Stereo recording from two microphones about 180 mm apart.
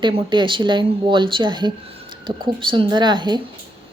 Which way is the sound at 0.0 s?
25° right (ahead or behind).